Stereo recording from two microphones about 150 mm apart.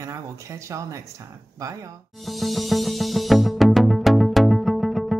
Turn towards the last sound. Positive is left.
turn(degrees=0)  # may be behind; listen again after turning